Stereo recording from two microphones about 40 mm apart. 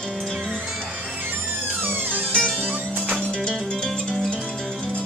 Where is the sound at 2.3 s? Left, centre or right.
Left.